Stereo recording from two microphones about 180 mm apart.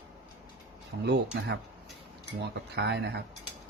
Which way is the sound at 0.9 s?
70° right (ahead or behind).